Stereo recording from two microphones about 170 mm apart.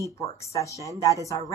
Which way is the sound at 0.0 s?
15° left (ahead or behind).